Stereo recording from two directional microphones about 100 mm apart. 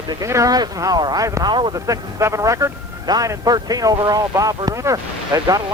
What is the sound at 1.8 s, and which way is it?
Speech, 35° right (ahead or behind).